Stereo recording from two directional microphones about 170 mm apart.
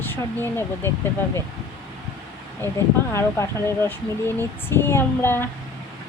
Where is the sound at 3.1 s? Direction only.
15° left (ahead or behind).